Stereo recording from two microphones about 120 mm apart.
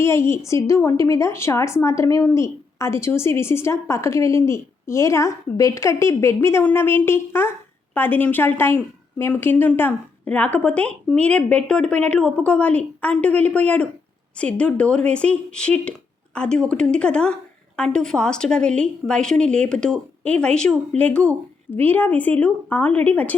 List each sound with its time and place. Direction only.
0.0 s a woman's voice: 20° left (ahead or behind)